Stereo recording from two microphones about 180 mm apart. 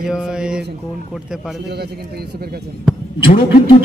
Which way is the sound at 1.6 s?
60° right (ahead or behind).